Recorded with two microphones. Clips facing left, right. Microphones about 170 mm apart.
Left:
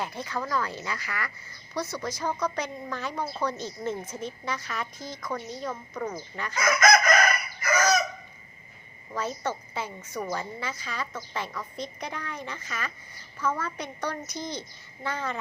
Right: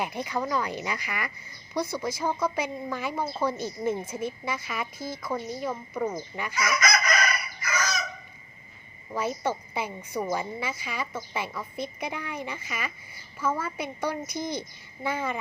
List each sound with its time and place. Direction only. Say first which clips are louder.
0.0 s a woman's voice: right 3 dB; 15° right (ahead or behind)
6.6 s chicken: left 5 dB; 50° left (ahead or behind)
9.1 s a woman's voice: right 2 dB; 10° right (ahead or behind)